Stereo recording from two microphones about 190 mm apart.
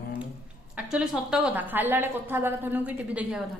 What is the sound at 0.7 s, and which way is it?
A woman's voice, 5° right (ahead or behind).